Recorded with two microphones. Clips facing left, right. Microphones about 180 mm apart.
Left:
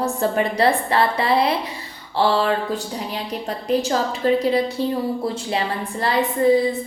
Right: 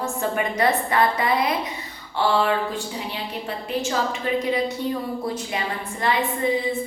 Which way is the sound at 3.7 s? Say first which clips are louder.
Left 5 dB; 35° left (ahead or behind).